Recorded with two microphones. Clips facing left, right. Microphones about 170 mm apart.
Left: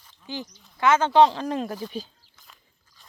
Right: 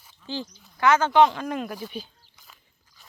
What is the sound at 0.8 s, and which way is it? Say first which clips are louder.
Speech: left 1 dB; 25° left (ahead or behind).